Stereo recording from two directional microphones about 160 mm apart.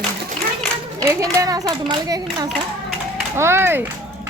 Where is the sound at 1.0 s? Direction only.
20° right (ahead or behind).